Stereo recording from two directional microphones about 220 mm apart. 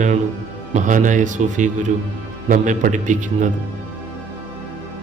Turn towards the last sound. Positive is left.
turn(degrees=-35)  # may be behind; listen again after turning